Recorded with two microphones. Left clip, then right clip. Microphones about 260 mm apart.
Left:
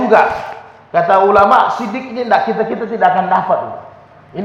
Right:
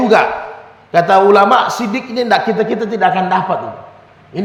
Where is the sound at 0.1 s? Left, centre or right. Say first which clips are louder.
Left 4 dB; right.